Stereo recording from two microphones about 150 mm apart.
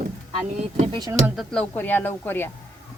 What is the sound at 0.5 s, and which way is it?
Speech, 50° right (ahead or behind).